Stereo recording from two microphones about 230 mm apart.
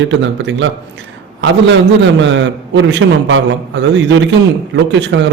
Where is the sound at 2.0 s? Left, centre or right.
Right.